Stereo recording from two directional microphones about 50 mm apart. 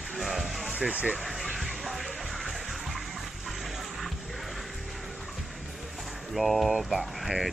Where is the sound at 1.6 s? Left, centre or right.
Centre.